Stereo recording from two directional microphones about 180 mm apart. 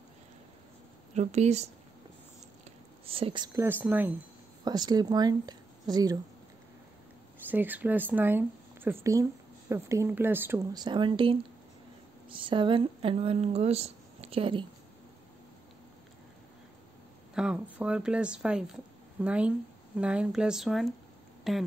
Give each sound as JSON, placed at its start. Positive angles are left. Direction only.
{"t": 1.1, "sound": "speech", "side_deg": -40}
{"t": 3.1, "sound": "speech", "side_deg": -30}
{"t": 3.8, "sound": "speech", "side_deg": -10}
{"t": 4.6, "sound": "speech", "side_deg": -20}
{"t": 7.4, "sound": "speech", "side_deg": -10}
{"t": 10.7, "sound": "speech", "side_deg": -25}
{"t": 17.3, "sound": "speech", "side_deg": -5}